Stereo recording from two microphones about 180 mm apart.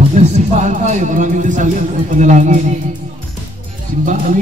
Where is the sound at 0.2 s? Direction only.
40° right (ahead or behind).